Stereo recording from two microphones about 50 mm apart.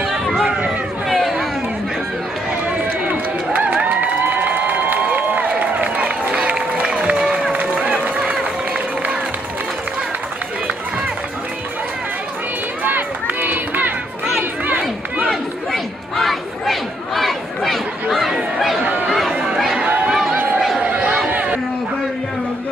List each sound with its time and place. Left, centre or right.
0.0 s run: centre
1.0 s a sound: centre
3.7 s crowd: right
7.8 s run: right
12.8 s run: right
15.2 s chatter: centre
19.0 s chatter: centre
20.1 s a sound: centre
20.8 s a sound: right